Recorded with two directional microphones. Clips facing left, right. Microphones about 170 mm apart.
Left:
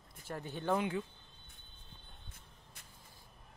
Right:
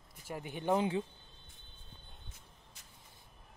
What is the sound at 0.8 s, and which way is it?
Speech, 25° right (ahead or behind).